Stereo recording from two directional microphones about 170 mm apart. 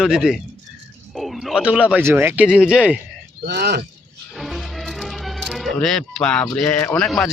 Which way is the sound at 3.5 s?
75° right (ahead or behind).